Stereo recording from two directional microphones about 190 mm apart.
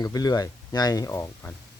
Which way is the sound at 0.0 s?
20° left (ahead or behind).